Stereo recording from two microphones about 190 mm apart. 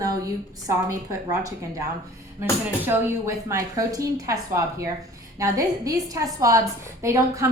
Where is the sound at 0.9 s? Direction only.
15° right (ahead or behind).